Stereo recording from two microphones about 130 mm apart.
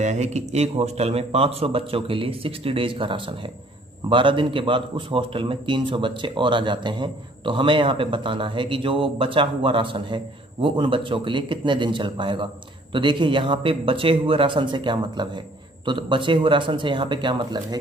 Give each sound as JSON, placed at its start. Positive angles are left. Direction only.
{"t": 0.0, "sound": "a man's voice", "side_deg": -65}